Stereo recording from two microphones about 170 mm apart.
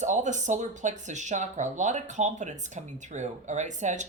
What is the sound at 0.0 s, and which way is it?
Speech, 45° right (ahead or behind).